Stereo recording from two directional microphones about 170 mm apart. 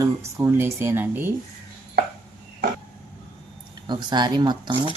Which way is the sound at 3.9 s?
25° right (ahead or behind).